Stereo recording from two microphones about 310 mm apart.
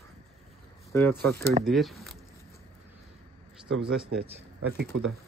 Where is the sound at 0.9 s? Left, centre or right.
Centre.